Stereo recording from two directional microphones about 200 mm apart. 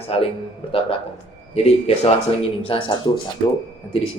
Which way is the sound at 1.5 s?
30° left (ahead or behind).